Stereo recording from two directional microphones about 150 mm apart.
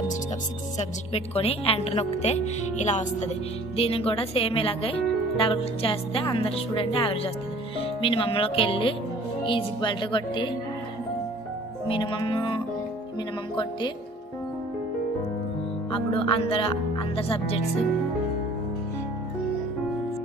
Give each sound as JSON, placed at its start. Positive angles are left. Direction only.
{"t": 0.7, "sound": "a woman's voice", "side_deg": 45}
{"t": 3.7, "sound": "speech", "side_deg": 40}
{"t": 11.9, "sound": "speech", "side_deg": 35}
{"t": 15.9, "sound": "speech", "side_deg": 35}